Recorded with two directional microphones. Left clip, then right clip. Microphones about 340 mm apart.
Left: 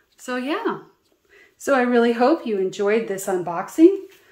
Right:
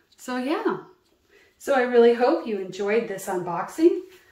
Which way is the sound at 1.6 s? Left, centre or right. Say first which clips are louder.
Even; centre.